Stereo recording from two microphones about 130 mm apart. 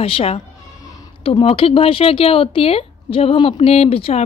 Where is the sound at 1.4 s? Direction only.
45° left (ahead or behind).